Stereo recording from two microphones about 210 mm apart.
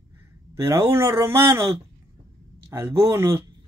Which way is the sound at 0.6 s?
10° right (ahead or behind).